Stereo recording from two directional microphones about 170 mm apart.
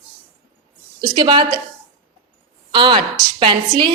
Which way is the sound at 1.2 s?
25° right (ahead or behind).